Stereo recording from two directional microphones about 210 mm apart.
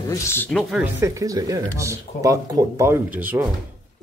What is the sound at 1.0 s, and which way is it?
Speech, 15° right (ahead or behind).